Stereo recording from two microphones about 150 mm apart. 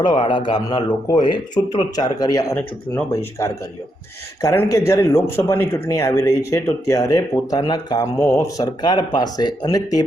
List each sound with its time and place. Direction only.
0.0 s speech: 30° left (ahead or behind)
4.4 s speech: 20° left (ahead or behind)